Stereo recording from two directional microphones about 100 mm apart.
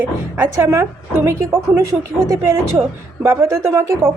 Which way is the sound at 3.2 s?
30° right (ahead or behind).